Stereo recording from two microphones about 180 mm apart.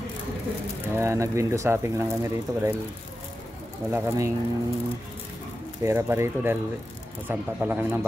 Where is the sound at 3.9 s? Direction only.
15° right (ahead or behind).